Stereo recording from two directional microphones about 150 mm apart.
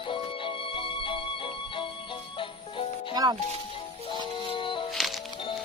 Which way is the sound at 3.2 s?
25° right (ahead or behind).